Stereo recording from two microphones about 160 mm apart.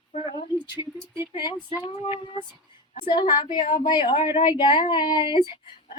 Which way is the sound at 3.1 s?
25° left (ahead or behind).